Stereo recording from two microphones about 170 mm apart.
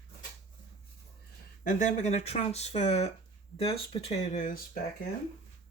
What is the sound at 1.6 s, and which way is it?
Speech, 45° left (ahead or behind).